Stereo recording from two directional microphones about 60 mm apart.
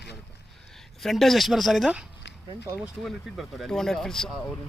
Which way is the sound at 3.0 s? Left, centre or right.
Centre.